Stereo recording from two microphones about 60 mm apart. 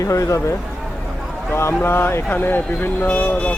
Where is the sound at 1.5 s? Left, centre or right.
Left.